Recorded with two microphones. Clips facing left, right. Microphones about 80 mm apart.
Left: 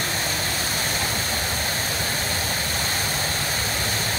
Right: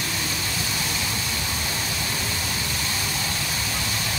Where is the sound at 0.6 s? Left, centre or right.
Left.